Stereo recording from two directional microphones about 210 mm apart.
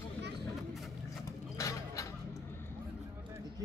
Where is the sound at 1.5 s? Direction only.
15° left (ahead or behind).